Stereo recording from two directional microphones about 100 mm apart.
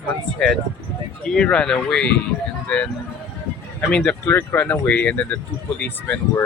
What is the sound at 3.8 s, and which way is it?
Speech, 10° left (ahead or behind).